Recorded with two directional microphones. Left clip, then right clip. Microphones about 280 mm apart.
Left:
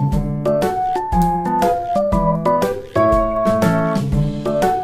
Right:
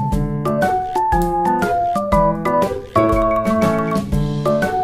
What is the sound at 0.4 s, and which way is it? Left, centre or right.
Music, centre.